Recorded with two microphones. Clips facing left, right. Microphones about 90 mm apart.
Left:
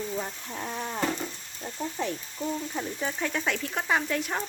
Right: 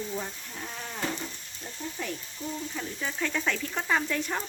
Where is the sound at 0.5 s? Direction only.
40° left (ahead or behind).